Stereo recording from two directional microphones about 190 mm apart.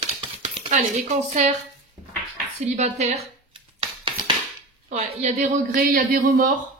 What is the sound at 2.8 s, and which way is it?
Speech, 35° right (ahead or behind).